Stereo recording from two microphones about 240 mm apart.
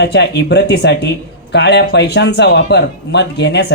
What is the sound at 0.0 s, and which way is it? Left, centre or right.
Speech, left.